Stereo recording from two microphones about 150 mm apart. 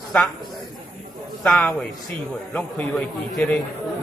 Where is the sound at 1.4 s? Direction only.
5° left (ahead or behind).